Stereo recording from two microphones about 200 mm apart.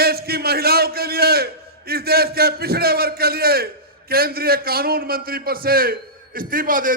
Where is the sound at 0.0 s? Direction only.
50° right (ahead or behind).